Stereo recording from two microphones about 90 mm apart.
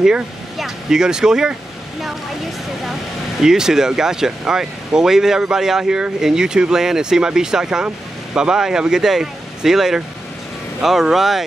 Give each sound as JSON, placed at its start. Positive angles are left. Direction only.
{"t": 0.0, "sound": "speech", "side_deg": -5}